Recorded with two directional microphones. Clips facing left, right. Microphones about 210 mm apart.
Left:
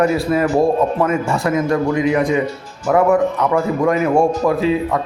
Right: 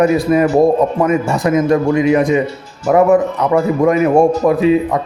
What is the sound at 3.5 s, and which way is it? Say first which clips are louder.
A man's voice: right 8 dB; 20° right (ahead or behind).